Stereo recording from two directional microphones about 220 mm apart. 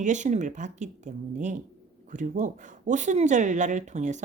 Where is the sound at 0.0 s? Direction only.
35° right (ahead or behind).